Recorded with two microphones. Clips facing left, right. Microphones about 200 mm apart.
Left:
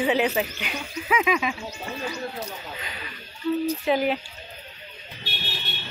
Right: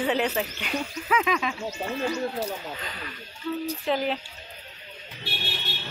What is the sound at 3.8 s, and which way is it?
Speech, 10° left (ahead or behind).